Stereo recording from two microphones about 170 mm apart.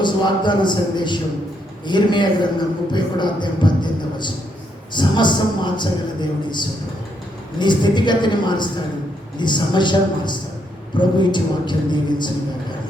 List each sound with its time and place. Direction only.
0.0 s a man's voice: 25° left (ahead or behind)
7.6 s a man's voice: 25° left (ahead or behind)